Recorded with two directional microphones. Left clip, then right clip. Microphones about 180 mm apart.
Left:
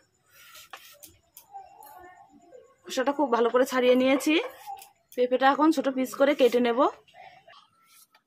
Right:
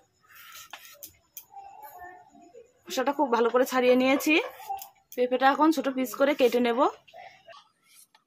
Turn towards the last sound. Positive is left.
turn(degrees=10)  # may be behind; listen again after turning